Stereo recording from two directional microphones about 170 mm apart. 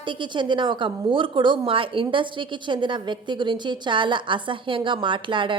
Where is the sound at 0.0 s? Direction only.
30° right (ahead or behind).